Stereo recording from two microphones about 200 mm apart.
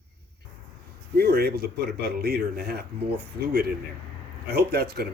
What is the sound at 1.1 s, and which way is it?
A man's voice, 55° right (ahead or behind).